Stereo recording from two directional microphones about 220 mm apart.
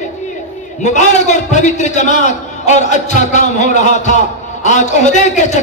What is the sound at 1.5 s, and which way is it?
Speech, 35° left (ahead or behind).